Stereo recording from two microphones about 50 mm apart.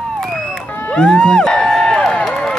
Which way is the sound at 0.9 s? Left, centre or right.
Centre.